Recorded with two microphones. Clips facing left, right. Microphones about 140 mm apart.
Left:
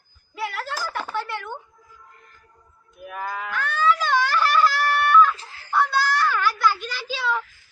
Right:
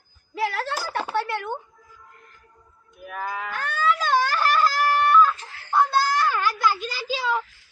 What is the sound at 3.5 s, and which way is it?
Music, 45° right (ahead or behind).